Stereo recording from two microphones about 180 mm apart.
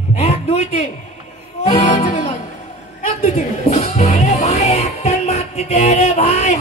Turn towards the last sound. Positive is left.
turn(degrees=35)  # may be behind; listen again after turning